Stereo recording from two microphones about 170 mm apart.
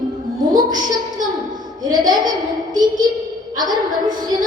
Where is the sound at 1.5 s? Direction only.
25° right (ahead or behind).